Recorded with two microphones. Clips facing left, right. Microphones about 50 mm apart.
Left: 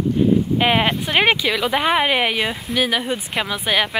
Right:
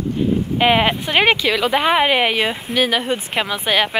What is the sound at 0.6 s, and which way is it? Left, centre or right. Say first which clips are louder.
Speech: right 2 dB; centre.